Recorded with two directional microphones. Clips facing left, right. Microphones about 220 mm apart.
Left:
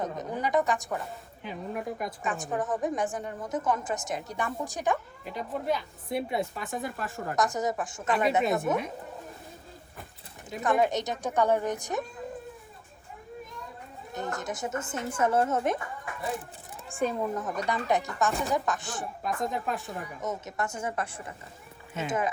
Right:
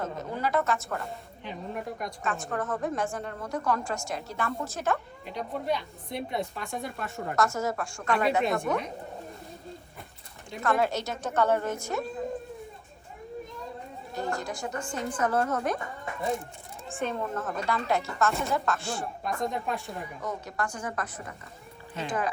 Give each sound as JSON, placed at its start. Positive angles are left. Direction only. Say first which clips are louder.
{"t": 0.0, "sound": "a woman's voice", "louder": "even", "side_deg": 15}
{"t": 1.5, "sound": "speech", "louder": "left 1 dB", "side_deg": 5}
{"t": 2.5, "sound": "a woman's voice", "louder": "left 2 dB", "side_deg": 15}
{"t": 5.2, "sound": "speech", "louder": "even", "side_deg": 0}
{"t": 7.3, "sound": "a woman's voice", "louder": "even", "side_deg": 15}
{"t": 8.4, "sound": "speech", "louder": "left 1 dB", "side_deg": 0}
{"t": 10.6, "sound": "a woman's voice", "louder": "left 1 dB", "side_deg": 15}
{"t": 14.1, "sound": "a woman's voice", "louder": "right 1 dB", "side_deg": 20}
{"t": 16.9, "sound": "speech", "louder": "left 3 dB", "side_deg": 5}
{"t": 17.7, "sound": "a woman's voice", "louder": "left 1 dB", "side_deg": 15}
{"t": 19.2, "sound": "speech", "louder": "left 1 dB", "side_deg": 0}
{"t": 20.2, "sound": "a woman's voice", "louder": "left 1 dB", "side_deg": 20}